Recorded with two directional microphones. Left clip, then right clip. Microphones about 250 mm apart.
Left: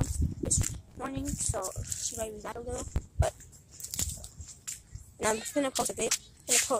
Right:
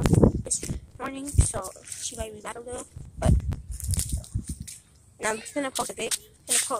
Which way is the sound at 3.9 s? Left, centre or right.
Centre.